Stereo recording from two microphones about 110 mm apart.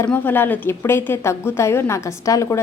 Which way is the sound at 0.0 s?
20° left (ahead or behind).